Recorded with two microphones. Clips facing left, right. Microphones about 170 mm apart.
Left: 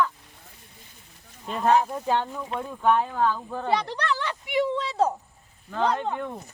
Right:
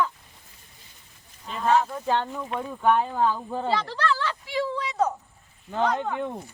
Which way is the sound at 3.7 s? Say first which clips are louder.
Left 1 dB; 20° left (ahead or behind).